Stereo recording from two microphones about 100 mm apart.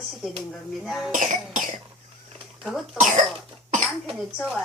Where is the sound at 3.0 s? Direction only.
5° right (ahead or behind).